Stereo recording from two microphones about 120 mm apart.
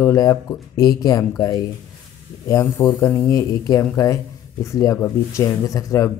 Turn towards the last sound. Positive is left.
turn(degrees=25)  # may be behind; listen again after turning